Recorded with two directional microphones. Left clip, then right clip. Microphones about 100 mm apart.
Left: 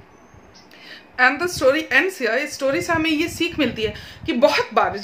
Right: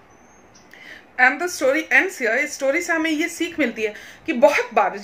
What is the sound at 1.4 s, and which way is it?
A woman's voice, 20° left (ahead or behind).